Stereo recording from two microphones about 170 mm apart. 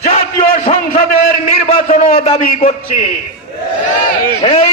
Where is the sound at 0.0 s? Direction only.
40° left (ahead or behind).